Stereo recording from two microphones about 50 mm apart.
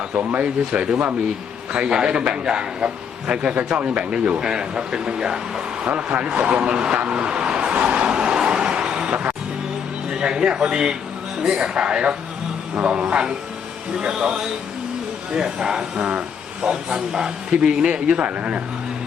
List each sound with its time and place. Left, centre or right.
0.1 s a man's voice: right
8.0 s vehicle: centre
10.1 s a man's voice: centre